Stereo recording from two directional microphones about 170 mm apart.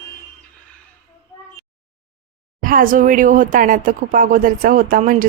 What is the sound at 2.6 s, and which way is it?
Speech, 55° right (ahead or behind).